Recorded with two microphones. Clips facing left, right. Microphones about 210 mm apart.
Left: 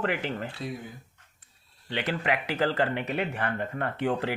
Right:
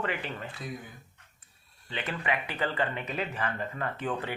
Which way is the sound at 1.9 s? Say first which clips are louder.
Left 4 dB; 75° left (ahead or behind).